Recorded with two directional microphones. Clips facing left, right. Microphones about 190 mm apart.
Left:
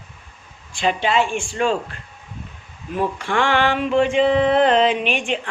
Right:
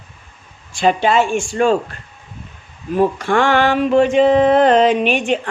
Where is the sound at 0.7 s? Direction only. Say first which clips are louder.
Right 5 dB; 45° right (ahead or behind).